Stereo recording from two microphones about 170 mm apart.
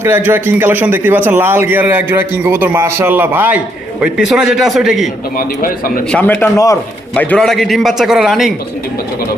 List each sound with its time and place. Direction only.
0.0 s a man's voice: 15° right (ahead or behind)
5.4 s a man's voice: 55° left (ahead or behind)
6.1 s a man's voice: 10° left (ahead or behind)